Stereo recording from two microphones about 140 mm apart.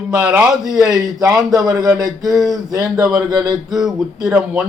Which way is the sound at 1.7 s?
25° right (ahead or behind).